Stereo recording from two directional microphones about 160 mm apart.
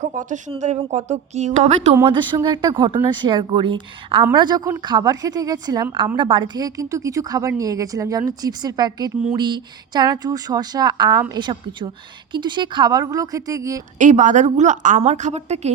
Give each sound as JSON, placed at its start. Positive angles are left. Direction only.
{"t": 0.0, "sound": "a woman's voice", "side_deg": -50}
{"t": 2.0, "sound": "a woman's voice", "side_deg": -30}
{"t": 14.0, "sound": "a woman's voice", "side_deg": -50}